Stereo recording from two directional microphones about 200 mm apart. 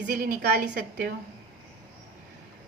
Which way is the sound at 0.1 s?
45° right (ahead or behind).